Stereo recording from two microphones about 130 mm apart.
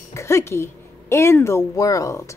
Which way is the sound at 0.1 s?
20° left (ahead or behind).